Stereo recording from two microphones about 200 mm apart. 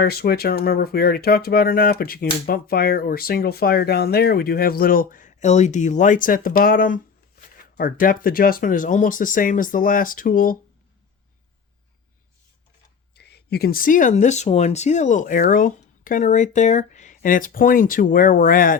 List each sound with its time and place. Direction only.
0.0 s speech: 50° left (ahead or behind)
13.1 s speech: 55° left (ahead or behind)